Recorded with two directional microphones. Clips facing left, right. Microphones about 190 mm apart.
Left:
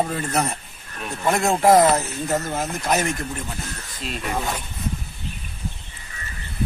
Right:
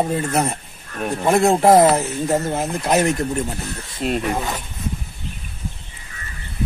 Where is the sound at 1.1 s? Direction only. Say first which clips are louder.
Right 5 dB; 35° right (ahead or behind).